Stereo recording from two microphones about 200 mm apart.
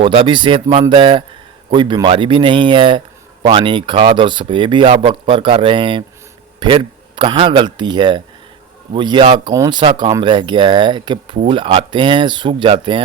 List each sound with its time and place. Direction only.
0.0 s speech: 25° right (ahead or behind)